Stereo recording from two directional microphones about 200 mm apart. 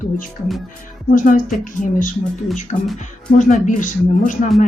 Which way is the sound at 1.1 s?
40° left (ahead or behind).